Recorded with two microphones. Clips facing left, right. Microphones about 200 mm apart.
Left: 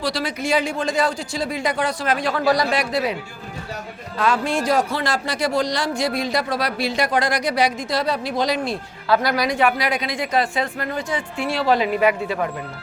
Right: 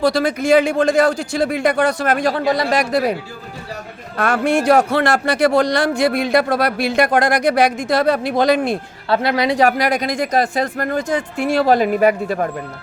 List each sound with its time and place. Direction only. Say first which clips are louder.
0.0 s a man's voice: right 8 dB; 50° right (ahead or behind)
2.3 s speech: right 1 dB; 25° right (ahead or behind)
2.6 s speech: right 5 dB; 50° right (ahead or behind)
4.2 s a man's voice: right 4 dB; 65° right (ahead or behind)
9.0 s speech: right 3 dB; 25° right (ahead or behind)
9.6 s speech: right 4 dB; 45° right (ahead or behind)